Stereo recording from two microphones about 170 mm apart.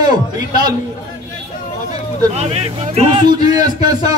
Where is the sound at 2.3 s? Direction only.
40° right (ahead or behind).